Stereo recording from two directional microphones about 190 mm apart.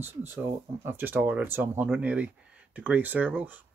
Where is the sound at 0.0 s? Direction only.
10° right (ahead or behind).